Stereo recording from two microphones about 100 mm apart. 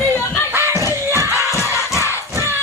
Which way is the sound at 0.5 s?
25° right (ahead or behind).